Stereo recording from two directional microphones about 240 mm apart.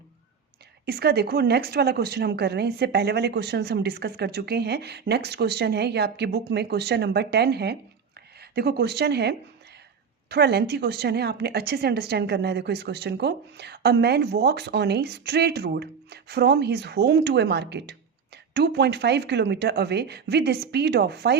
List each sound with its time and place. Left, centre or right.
0.9 s a woman's voice: right